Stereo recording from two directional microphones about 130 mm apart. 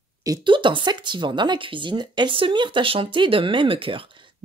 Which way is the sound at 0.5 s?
40° right (ahead or behind).